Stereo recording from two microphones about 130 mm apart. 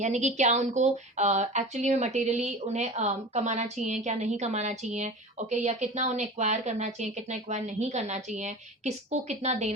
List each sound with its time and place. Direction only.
0.0 s speech: 65° right (ahead or behind)